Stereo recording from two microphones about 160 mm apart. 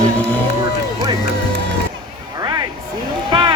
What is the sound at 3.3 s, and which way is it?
Run, 30° right (ahead or behind).